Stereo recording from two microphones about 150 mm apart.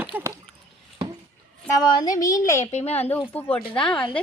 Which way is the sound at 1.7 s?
25° left (ahead or behind).